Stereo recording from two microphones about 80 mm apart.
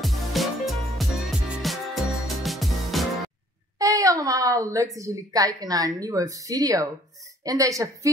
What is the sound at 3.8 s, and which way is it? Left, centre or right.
A woman's voice, right.